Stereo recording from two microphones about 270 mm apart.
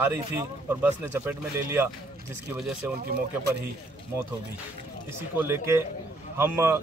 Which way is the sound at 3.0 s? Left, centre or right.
Right.